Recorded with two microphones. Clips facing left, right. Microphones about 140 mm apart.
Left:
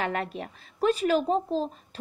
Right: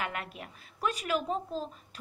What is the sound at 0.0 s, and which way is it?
A woman's voice, 35° left (ahead or behind).